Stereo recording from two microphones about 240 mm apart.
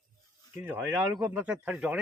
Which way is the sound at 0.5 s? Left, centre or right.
Centre.